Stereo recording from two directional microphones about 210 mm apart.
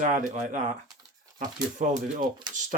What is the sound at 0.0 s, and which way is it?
Speech, 40° right (ahead or behind).